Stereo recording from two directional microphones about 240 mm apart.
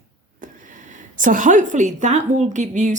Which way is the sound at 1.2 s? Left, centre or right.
Right.